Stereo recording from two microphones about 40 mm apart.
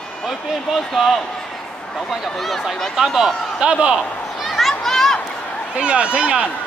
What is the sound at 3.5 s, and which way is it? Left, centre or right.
Speech, right.